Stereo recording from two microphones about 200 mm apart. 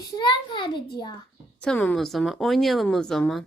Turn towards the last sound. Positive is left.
turn(degrees=0)  # may be behind; listen again after turning